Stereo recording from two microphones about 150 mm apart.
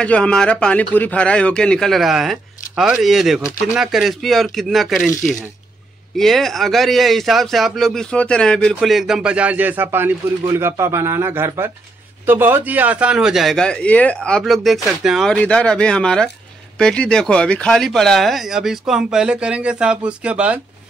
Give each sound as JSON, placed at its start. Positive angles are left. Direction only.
{"t": 0.0, "sound": "a man's voice", "side_deg": 5}
{"t": 6.1, "sound": "a man's voice", "side_deg": 0}